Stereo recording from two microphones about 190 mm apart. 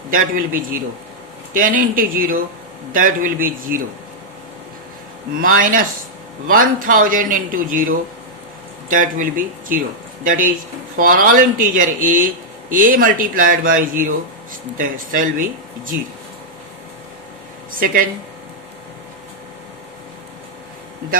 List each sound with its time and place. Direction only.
0.1 s a man's voice: 45° right (ahead or behind)
5.4 s a man's voice: 45° right (ahead or behind)
17.7 s speech: 45° right (ahead or behind)